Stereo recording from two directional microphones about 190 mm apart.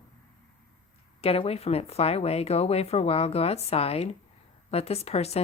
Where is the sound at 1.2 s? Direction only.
30° left (ahead or behind).